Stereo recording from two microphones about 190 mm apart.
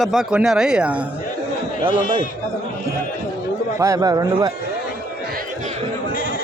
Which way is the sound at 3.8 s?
15° right (ahead or behind).